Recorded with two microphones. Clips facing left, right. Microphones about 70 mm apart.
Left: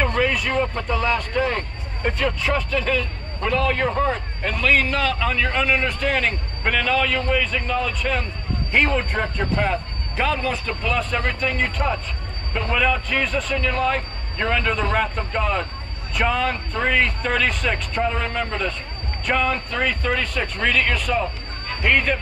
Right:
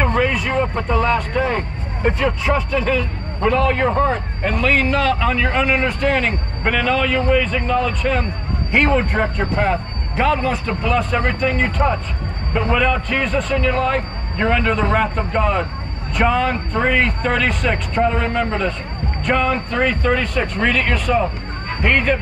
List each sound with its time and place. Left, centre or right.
0.0 s a sound: centre
2.0 s a man's voice: centre
16.5 s a man's voice: centre